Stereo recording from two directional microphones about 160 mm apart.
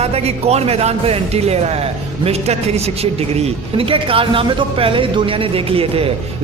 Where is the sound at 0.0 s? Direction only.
40° right (ahead or behind).